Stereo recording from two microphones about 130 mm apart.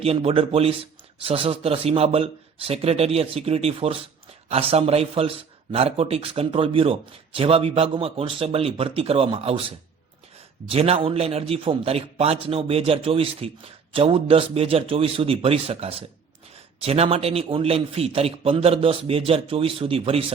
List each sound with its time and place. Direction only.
0.0 s a man's voice: 50° right (ahead or behind)